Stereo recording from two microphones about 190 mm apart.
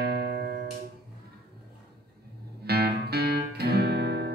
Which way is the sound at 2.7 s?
55° right (ahead or behind).